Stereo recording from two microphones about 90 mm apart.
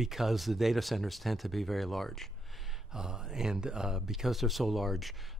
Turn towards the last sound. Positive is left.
turn(degrees=0)  # may be behind; listen again after turning